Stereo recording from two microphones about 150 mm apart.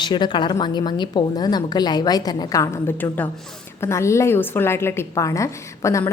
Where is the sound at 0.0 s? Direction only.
30° left (ahead or behind).